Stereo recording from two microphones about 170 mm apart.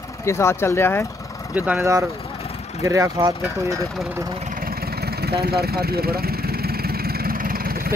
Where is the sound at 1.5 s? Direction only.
10° right (ahead or behind).